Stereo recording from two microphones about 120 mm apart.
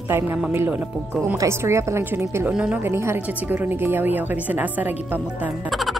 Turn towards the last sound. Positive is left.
turn(degrees=-15)  # may be behind; listen again after turning